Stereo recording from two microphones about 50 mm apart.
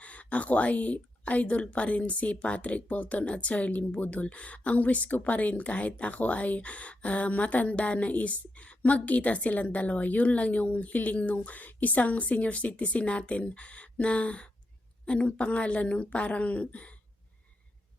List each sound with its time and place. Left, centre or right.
0.0 s speech: left